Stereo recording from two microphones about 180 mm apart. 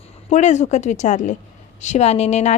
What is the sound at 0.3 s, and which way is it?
A woman's voice, 40° left (ahead or behind).